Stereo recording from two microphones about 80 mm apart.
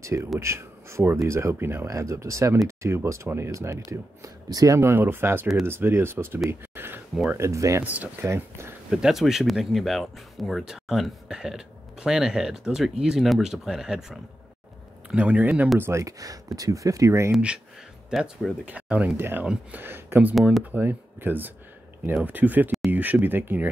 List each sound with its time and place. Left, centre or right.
0.0 s speech: right
4.7 s speech: right
6.7 s a sound: right
7.3 s speech: right
7.8 s speech: centre
8.2 s speech: right
8.9 s speech: centre
15.8 s speech: right
18.1 s speech: centre
18.7 s speech: centre
19.1 s speech: right
19.4 s speech: centre
19.8 s speech: right